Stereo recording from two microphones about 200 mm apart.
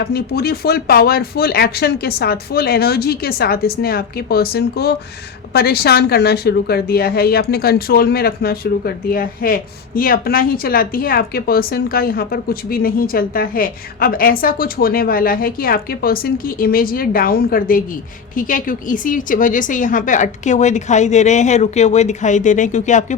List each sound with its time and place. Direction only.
0.0 s a woman's voice: 55° left (ahead or behind); by 23.1 s 35° left (ahead or behind)